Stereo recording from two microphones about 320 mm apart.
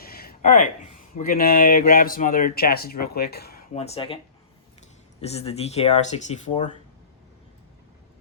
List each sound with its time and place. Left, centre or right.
0.0 s speech: left
5.2 s speech: centre